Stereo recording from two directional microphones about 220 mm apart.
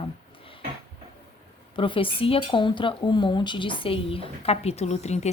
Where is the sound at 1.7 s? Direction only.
25° left (ahead or behind).